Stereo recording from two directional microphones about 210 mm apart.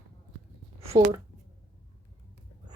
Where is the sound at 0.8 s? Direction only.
15° right (ahead or behind).